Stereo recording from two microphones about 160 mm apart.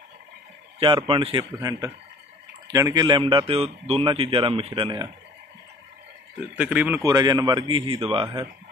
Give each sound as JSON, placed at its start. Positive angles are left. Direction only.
{"t": 0.7, "sound": "speech", "side_deg": -35}
{"t": 6.5, "sound": "speech", "side_deg": -10}
{"t": 7.0, "sound": "speech", "side_deg": -25}